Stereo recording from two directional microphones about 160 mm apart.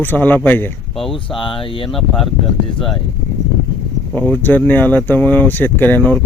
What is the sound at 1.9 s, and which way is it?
Speech, centre (ahead or behind).